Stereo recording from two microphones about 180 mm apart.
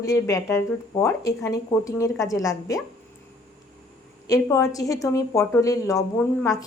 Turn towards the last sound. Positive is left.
turn(degrees=15)  # may be behind; listen again after turning